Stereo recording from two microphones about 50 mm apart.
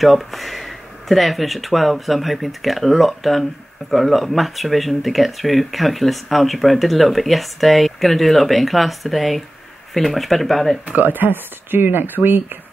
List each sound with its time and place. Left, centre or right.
0.0 s speech: centre
10.9 s speech: right